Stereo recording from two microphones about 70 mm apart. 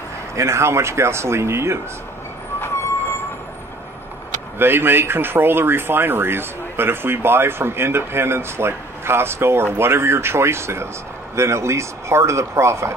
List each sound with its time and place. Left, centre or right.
0.4 s speech: right
4.6 s a man's voice: right